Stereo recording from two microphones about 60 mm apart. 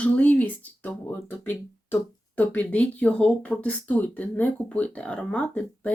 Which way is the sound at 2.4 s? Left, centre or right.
Left.